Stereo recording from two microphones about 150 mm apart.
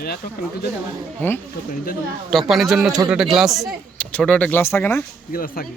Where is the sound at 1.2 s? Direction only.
15° left (ahead or behind).